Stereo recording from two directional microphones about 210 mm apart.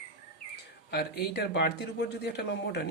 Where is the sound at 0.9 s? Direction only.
50° left (ahead or behind).